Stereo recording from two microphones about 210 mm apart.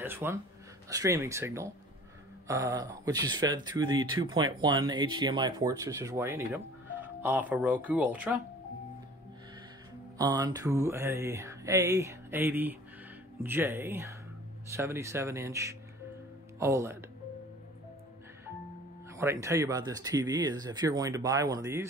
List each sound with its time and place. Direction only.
0.0 s speech: 10° right (ahead or behind)
10.1 s speech: 20° right (ahead or behind)
19.1 s speech: 15° right (ahead or behind)